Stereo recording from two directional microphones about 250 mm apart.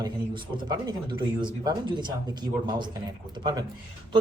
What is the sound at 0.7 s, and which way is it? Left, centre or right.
Speech, centre.